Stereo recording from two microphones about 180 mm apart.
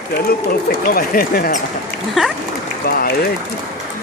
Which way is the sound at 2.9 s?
55° left (ahead or behind).